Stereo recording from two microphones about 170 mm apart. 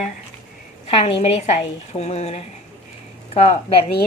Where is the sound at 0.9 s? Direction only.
35° left (ahead or behind).